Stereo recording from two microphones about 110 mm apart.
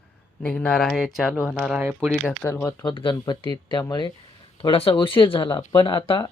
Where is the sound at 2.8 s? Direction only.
45° left (ahead or behind).